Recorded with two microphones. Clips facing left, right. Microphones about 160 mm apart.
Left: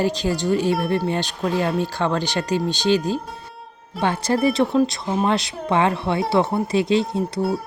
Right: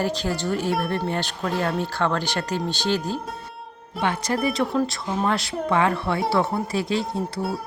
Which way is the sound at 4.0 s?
30° left (ahead or behind).